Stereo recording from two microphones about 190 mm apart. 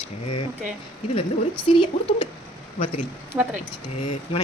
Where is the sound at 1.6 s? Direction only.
25° left (ahead or behind).